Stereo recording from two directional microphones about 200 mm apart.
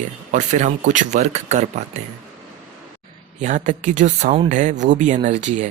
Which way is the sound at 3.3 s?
40° right (ahead or behind).